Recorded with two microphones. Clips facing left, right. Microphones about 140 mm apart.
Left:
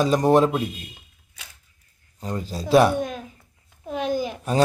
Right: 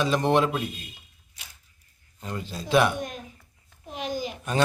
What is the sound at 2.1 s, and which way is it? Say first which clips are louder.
Speech: left 5 dB; 35° left (ahead or behind).